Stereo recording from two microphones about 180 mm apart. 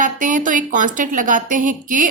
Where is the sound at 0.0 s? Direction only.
45° right (ahead or behind).